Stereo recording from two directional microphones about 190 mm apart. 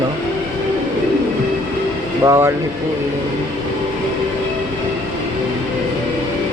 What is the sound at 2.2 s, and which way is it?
Speech, 20° right (ahead or behind).